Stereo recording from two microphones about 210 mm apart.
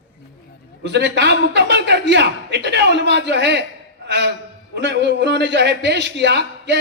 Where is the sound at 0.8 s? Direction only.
55° right (ahead or behind).